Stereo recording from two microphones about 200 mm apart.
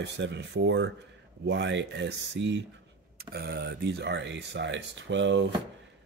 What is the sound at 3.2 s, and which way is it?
Speech, 50° right (ahead or behind).